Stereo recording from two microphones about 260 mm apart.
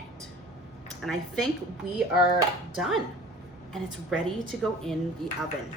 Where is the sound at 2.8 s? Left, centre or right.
Centre.